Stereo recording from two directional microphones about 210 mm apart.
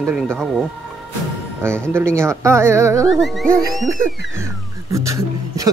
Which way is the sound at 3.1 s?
Centre (ahead or behind).